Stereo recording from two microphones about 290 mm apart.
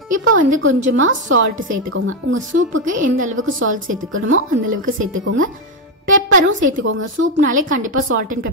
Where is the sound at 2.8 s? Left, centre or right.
Right.